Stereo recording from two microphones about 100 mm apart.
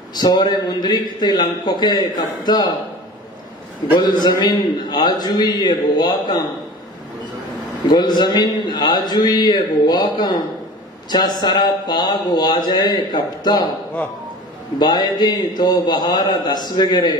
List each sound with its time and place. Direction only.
0.1 s a man's voice: 45° left (ahead or behind)
3.9 s a man's voice: 45° left (ahead or behind)
7.9 s a man's voice: 45° left (ahead or behind)
14.8 s a man's voice: 45° left (ahead or behind)